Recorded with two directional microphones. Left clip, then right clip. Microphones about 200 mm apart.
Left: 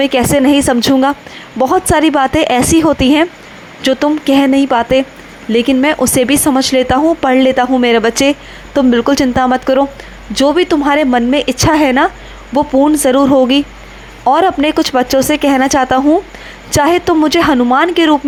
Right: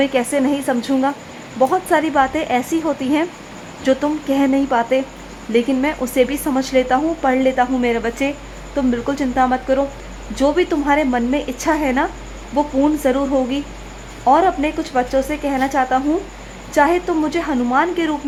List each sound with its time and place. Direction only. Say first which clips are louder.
0.0 s a woman's voice: left 6 dB; 25° left (ahead or behind)